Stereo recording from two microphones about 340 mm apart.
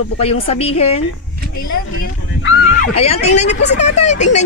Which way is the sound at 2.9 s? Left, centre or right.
Centre.